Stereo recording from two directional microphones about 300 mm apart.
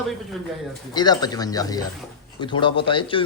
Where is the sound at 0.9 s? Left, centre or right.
Centre.